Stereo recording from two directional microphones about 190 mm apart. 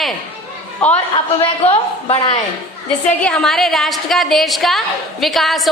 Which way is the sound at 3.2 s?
Centre (ahead or behind).